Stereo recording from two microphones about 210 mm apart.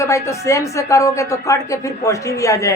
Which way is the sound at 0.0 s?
15° left (ahead or behind).